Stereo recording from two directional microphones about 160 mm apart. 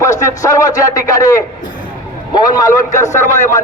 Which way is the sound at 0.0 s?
20° left (ahead or behind).